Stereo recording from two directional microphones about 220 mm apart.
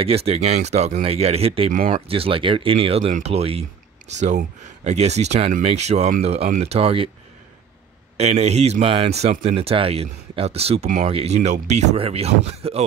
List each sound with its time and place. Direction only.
0.0 s speech: 25° right (ahead or behind)
8.2 s speech: 30° right (ahead or behind)